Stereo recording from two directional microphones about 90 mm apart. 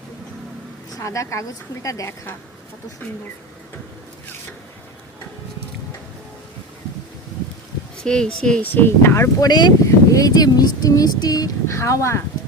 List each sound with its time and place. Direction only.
0.9 s speech: 35° left (ahead or behind)
8.0 s speech: 10° left (ahead or behind)
8.7 s speech: 25° left (ahead or behind)
9.4 s speech: 50° left (ahead or behind)
9.8 s speech: 40° left (ahead or behind)